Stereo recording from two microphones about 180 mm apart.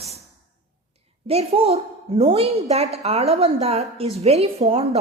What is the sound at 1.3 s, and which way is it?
A woman's voice, 35° right (ahead or behind).